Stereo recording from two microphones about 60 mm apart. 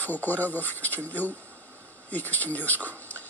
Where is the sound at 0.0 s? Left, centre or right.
Left.